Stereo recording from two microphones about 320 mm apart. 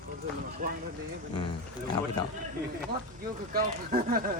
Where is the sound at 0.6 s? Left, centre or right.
Right.